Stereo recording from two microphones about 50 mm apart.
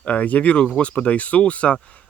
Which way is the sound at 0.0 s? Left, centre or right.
Left.